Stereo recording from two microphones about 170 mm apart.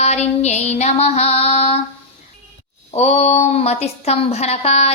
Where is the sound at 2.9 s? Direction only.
40° left (ahead or behind).